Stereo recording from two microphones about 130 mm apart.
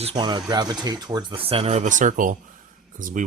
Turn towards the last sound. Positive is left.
turn(degrees=-80)